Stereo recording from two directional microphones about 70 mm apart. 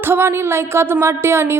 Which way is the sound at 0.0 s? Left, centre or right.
Right.